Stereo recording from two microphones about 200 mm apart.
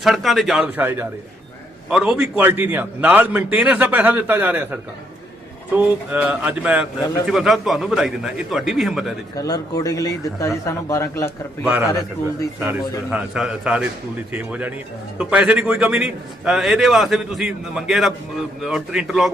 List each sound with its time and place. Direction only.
0.0 s a man's voice: centre (ahead or behind)
9.3 s speech: 20° left (ahead or behind)
11.6 s a man's voice: 5° right (ahead or behind)